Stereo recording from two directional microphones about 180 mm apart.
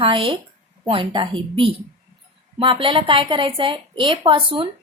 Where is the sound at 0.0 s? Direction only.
30° right (ahead or behind).